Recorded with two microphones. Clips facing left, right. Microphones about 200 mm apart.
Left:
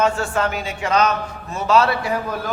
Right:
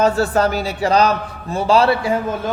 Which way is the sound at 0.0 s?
35° right (ahead or behind).